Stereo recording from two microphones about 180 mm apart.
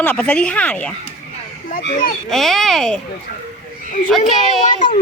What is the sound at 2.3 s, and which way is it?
Speech, centre (ahead or behind).